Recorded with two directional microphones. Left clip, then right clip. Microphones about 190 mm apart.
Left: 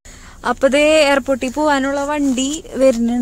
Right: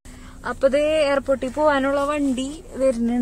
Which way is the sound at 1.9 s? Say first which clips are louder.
Left 3 dB; 20° left (ahead or behind).